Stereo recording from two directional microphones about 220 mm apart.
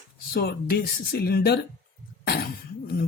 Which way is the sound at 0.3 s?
45° left (ahead or behind).